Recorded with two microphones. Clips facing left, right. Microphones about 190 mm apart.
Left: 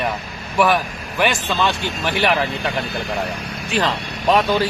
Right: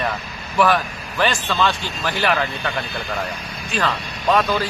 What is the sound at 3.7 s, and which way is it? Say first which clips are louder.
Speech: left 2 dB; 20° left (ahead or behind).